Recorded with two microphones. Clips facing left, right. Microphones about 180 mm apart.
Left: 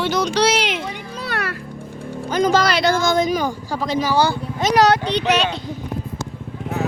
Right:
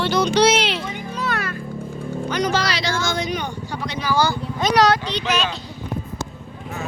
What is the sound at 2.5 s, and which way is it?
Speech, 50° left (ahead or behind).